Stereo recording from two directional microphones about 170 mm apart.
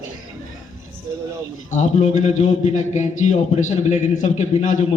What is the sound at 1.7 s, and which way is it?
A man's voice, 45° left (ahead or behind).